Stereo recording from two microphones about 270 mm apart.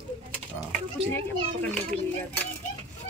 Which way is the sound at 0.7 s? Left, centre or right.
Centre.